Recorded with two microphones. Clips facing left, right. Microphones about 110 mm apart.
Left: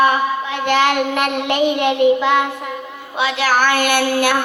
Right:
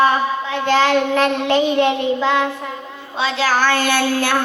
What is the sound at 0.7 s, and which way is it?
Speech, 15° left (ahead or behind).